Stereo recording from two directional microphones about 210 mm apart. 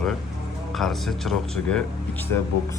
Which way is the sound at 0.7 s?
Centre (ahead or behind).